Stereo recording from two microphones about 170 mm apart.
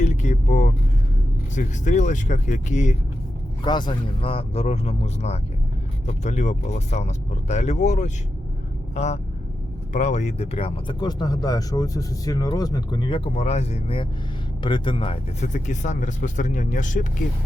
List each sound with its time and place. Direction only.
0.0 s speech: 45° left (ahead or behind)
3.6 s speech: 25° left (ahead or behind); by 17.2 s 50° left (ahead or behind)